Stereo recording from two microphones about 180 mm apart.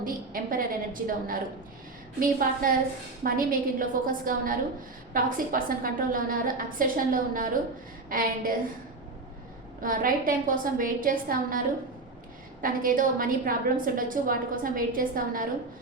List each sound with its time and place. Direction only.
0.0 s a woman's voice: 50° right (ahead or behind)
9.8 s a woman's voice: 50° right (ahead or behind)
12.6 s a woman's voice: 50° right (ahead or behind)